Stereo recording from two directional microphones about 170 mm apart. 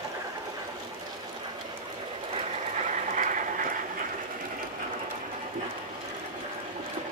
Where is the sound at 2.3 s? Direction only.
45° right (ahead or behind).